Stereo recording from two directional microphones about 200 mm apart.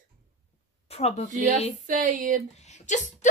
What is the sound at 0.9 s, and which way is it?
Speech, 30° left (ahead or behind).